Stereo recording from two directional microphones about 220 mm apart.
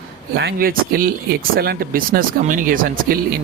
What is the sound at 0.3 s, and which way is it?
Speech, 45° right (ahead or behind).